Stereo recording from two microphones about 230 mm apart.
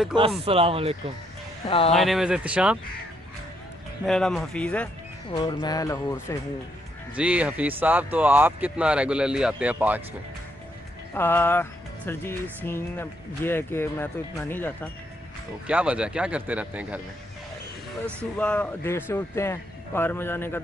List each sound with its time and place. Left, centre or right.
0.5 s speech: right
1.7 s speech: left
2.0 s speech: centre
4.0 s speech: centre
5.3 s speech: centre
7.2 s speech: centre
11.1 s speech: centre
15.6 s speech: centre
18.0 s speech: centre